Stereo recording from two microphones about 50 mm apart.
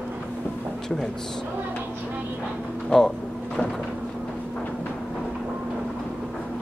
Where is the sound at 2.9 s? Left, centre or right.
Centre.